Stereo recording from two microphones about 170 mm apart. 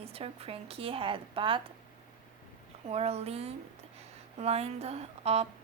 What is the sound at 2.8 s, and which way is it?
Speech, 40° right (ahead or behind).